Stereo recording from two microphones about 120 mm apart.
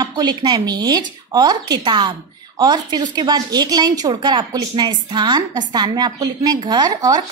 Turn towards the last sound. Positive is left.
turn(degrees=-30)  # may be behind; listen again after turning